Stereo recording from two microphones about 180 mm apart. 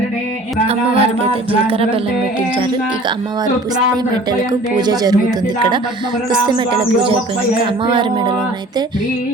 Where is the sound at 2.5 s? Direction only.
25° right (ahead or behind).